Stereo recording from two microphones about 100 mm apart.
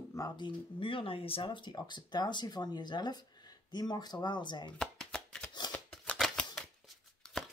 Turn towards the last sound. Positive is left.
turn(degrees=5)  # may be behind; listen again after turning